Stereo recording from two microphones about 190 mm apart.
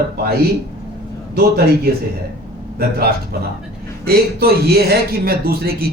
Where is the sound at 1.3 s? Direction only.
55° right (ahead or behind).